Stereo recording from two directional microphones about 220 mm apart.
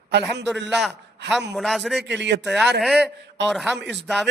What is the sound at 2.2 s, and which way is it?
Speech, 50° right (ahead or behind).